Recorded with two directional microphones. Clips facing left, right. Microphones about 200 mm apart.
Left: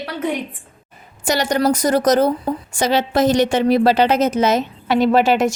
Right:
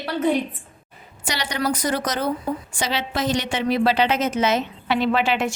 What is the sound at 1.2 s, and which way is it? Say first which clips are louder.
A woman's voice: left 8 dB; 45° left (ahead or behind).